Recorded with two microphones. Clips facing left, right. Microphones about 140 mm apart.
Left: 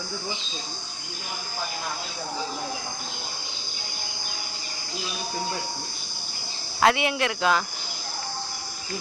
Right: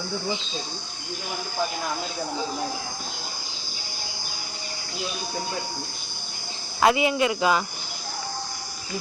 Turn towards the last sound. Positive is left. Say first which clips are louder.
# right 2 dB
turn(degrees=-5)  # may be behind; listen again after turning